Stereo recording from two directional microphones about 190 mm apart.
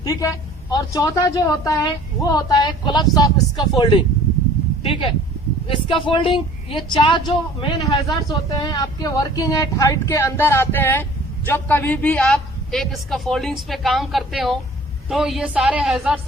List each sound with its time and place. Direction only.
0.0 s a man's voice: 15° left (ahead or behind); by 16.2 s 5° right (ahead or behind)